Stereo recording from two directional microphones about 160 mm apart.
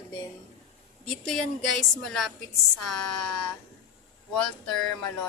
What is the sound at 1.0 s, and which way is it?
A woman's voice, 5° left (ahead or behind).